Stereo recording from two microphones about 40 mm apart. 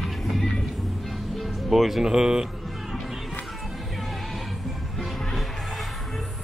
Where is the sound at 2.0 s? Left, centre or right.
Centre.